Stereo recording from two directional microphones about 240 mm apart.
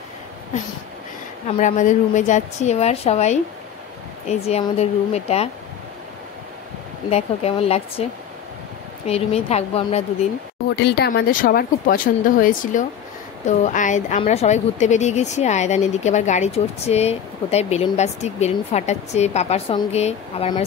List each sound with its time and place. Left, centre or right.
1.6 s speech: left
7.1 s speech: left
9.0 s speech: left
10.8 s speech: left